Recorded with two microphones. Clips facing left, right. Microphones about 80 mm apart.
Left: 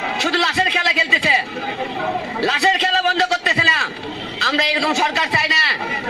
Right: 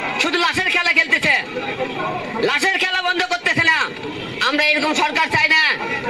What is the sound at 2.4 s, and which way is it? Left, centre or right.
Speech, left.